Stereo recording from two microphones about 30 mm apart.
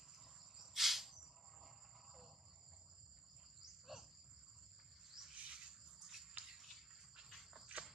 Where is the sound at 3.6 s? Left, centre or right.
Centre.